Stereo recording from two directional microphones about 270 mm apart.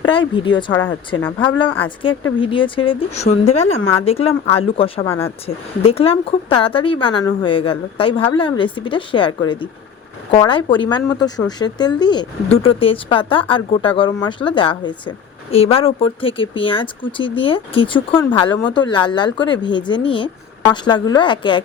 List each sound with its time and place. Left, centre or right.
0.0 s speech: centre
1.8 s speech: centre